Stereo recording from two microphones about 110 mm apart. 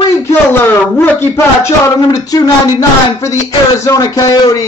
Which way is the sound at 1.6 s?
30° left (ahead or behind).